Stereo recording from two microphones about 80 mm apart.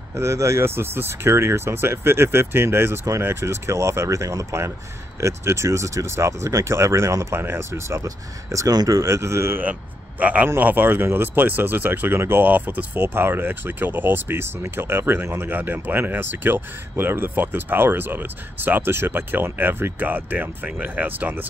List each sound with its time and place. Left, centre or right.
0.1 s speech: right
9.6 s speech: centre